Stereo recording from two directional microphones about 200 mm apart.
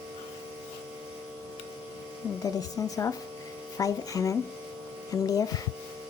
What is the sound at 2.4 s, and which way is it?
A woman's voice, 15° left (ahead or behind).